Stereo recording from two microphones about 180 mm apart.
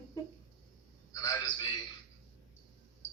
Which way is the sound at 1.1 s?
20° left (ahead or behind).